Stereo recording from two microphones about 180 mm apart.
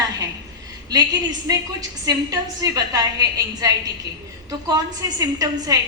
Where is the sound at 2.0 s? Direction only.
20° right (ahead or behind).